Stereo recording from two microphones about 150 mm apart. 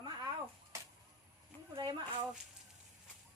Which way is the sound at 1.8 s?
30° right (ahead or behind).